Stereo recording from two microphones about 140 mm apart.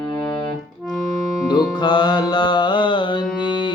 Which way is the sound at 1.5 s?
30° left (ahead or behind).